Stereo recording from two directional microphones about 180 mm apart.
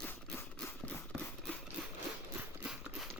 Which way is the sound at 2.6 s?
5° right (ahead or behind).